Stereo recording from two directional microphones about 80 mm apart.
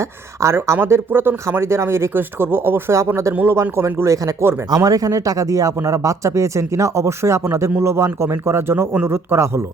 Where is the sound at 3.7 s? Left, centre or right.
Right.